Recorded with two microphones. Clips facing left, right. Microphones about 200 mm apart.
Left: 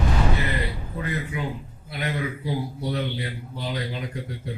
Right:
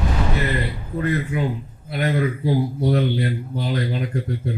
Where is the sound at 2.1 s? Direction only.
55° right (ahead or behind).